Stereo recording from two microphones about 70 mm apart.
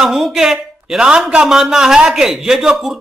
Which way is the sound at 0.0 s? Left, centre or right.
Centre.